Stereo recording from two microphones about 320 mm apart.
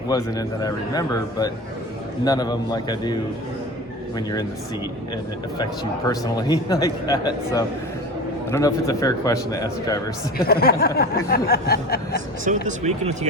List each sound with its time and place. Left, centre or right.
0.1 s a man's voice: centre
6.1 s a man's voice: centre
10.3 s a sound: left
12.6 s speech: right